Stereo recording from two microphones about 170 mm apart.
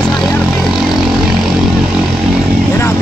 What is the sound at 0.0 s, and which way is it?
Vehicle, 5° left (ahead or behind).